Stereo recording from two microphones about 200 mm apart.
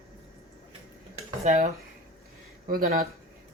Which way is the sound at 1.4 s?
40° right (ahead or behind).